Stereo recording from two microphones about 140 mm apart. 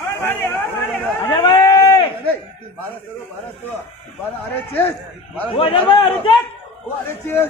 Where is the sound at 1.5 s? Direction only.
30° left (ahead or behind).